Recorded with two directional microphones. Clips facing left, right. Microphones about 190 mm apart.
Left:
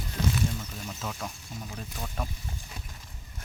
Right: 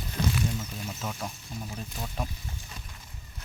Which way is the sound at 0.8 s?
5° right (ahead or behind).